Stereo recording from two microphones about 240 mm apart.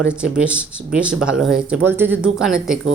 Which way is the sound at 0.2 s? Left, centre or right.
Centre.